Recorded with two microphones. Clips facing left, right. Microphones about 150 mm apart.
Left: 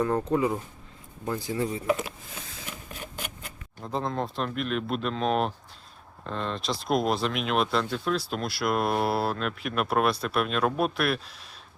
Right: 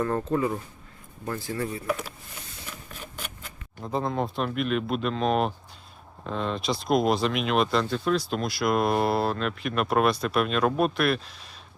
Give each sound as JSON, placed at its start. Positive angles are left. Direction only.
{"t": 0.0, "sound": "speech", "side_deg": 15}
{"t": 3.8, "sound": "speech", "side_deg": -5}